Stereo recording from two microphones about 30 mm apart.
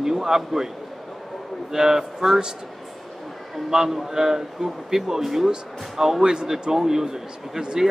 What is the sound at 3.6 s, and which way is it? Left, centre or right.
A man's voice, centre.